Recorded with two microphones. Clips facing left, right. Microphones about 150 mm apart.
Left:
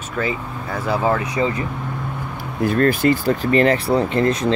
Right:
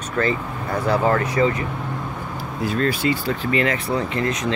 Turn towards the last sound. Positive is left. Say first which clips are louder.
# left 5 dB
turn(degrees=30)  # may be behind; listen again after turning